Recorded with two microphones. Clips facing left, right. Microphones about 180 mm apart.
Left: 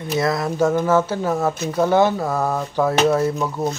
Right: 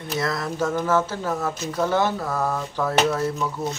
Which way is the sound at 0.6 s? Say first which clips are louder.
Left 6 dB; 25° left (ahead or behind).